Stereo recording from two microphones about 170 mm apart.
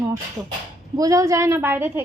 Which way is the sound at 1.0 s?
20° right (ahead or behind).